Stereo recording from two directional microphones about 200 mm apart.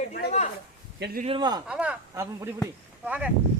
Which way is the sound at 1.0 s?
50° right (ahead or behind).